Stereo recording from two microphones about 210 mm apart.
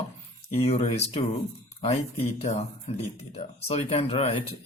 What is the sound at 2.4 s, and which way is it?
A man's voice, 30° left (ahead or behind).